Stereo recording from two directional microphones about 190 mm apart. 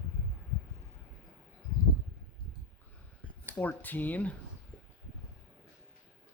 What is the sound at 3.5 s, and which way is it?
Speech, 10° left (ahead or behind).